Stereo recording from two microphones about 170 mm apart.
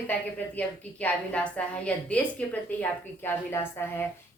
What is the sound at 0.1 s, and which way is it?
A woman's voice, 10° left (ahead or behind).